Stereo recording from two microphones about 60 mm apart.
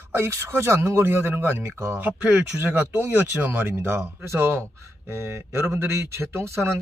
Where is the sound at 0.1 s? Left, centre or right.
Right.